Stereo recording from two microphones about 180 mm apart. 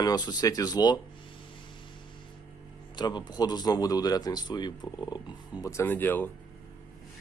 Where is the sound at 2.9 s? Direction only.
25° left (ahead or behind).